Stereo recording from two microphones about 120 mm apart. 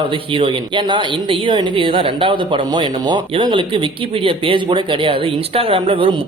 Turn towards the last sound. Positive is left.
turn(degrees=-45)  # may be behind; listen again after turning